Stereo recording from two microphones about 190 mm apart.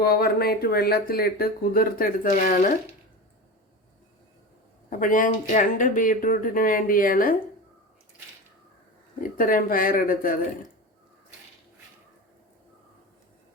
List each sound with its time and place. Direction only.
0.0 s speech: 55° left (ahead or behind)
4.9 s speech: 45° left (ahead or behind)
9.4 s speech: 45° left (ahead or behind)